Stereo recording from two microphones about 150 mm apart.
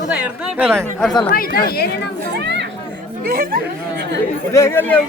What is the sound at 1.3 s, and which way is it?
Speech, 80° left.